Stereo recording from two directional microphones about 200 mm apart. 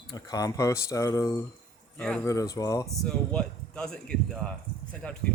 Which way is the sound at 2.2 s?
15° left (ahead or behind).